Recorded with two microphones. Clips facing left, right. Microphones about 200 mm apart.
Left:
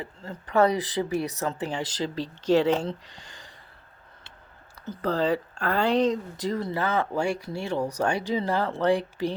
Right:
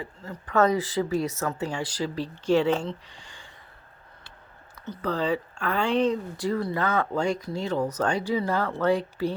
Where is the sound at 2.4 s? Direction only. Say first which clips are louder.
Left 1 dB; 40° left (ahead or behind).